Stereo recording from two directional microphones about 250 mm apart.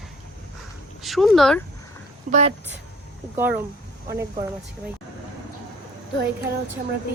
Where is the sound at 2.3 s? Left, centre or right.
Right.